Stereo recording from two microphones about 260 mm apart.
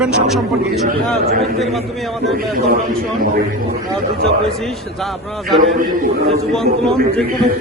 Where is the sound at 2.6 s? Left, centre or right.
Right.